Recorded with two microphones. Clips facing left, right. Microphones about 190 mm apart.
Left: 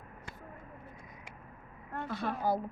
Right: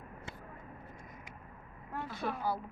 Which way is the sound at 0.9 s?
50° right (ahead or behind).